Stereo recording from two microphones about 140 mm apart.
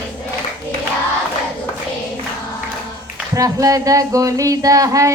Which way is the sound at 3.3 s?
25° right (ahead or behind).